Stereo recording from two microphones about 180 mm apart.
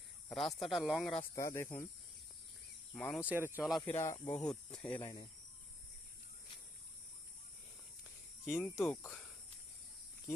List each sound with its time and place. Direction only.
0.3 s speech: centre (ahead or behind)
1.4 s speech: 15° left (ahead or behind)
2.9 s speech: 5° left (ahead or behind)
3.2 s speech: 10° right (ahead or behind)
3.8 s speech: 15° left (ahead or behind)
4.4 s speech: 5° left (ahead or behind)
5.0 s speech: 20° left (ahead or behind)
8.4 s speech: centre (ahead or behind)
8.8 s speech: 10° left (ahead or behind)